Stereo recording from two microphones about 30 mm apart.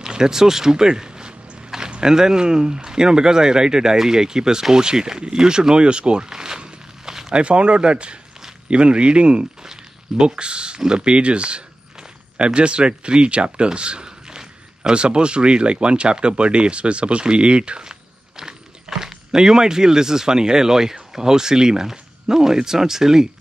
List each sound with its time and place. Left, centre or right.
0.0 s speech: centre
7.3 s speech: right
9.6 s a sound: right
10.2 s speech: right
14.0 s speech: right
18.3 s speech: centre